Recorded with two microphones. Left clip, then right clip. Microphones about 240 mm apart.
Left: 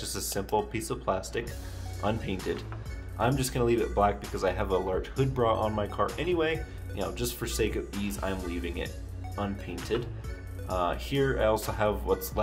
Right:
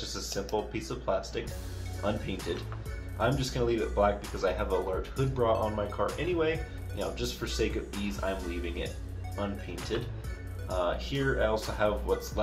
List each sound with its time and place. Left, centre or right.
0.0 s speech: left
9.9 s speech: left